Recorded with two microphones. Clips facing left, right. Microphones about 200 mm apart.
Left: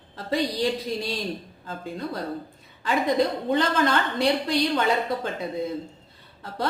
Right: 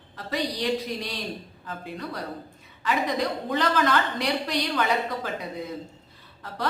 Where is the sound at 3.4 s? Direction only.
30° left (ahead or behind).